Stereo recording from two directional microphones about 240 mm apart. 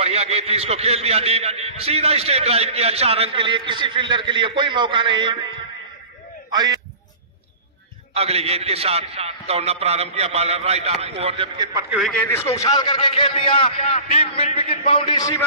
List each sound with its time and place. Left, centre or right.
0.0 s a man's voice: right
6.5 s a man's voice: centre
8.1 s a man's voice: right
11.9 s a man's voice: centre
12.3 s a man's voice: centre